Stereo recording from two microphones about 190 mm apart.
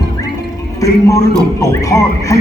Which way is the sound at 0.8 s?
15° left (ahead or behind).